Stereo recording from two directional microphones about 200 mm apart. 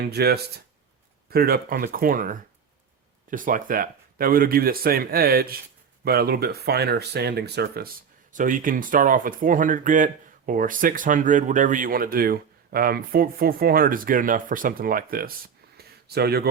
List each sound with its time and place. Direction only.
0.1 s speech: 55° right (ahead or behind)
8.3 s speech: 40° right (ahead or behind)
15.8 s a sound: 50° right (ahead or behind)